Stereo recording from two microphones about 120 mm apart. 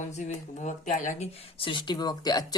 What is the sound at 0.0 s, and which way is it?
Speech, 80° left.